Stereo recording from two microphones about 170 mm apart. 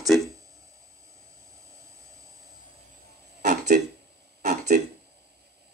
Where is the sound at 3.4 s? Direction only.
45° right (ahead or behind).